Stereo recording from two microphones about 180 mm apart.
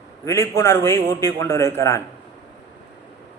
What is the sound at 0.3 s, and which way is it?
A man's voice, 15° left (ahead or behind).